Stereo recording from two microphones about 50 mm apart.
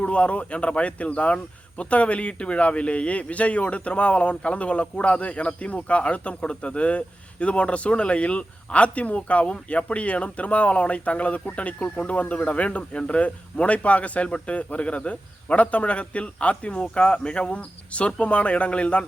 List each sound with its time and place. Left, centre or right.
0.0 s speech: left